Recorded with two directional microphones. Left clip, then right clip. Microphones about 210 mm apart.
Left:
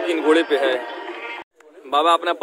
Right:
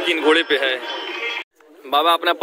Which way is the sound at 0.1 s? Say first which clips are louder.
Right 1 dB; centre (ahead or behind).